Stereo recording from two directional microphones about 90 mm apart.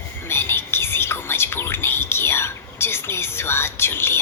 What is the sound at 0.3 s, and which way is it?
Whispering, 30° left (ahead or behind).